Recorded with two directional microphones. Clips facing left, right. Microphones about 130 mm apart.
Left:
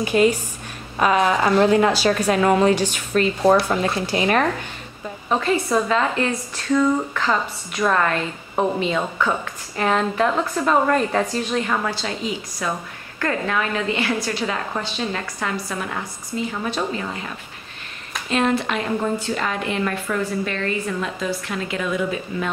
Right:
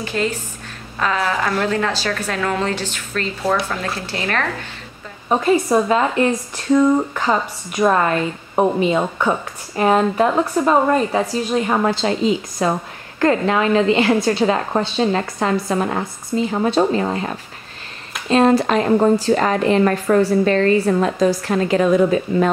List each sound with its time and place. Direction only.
0.0 s a woman's voice: 15° left (ahead or behind)
5.3 s a woman's voice: 15° right (ahead or behind)
8.1 s a woman's voice: 10° right (ahead or behind)
11.6 s a woman's voice: 30° right (ahead or behind)